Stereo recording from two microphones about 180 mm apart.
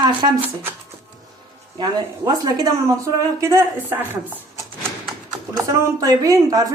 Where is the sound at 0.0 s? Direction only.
25° right (ahead or behind).